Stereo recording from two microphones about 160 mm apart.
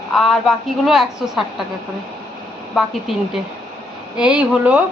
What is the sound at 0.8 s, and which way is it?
Speech, centre (ahead or behind).